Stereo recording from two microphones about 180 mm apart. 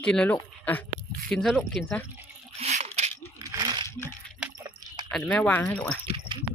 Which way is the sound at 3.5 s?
20° right (ahead or behind).